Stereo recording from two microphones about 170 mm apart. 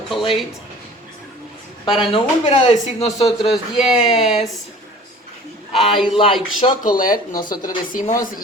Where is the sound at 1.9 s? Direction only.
35° left (ahead or behind).